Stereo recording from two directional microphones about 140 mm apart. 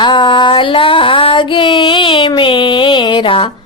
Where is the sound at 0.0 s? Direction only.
35° left (ahead or behind).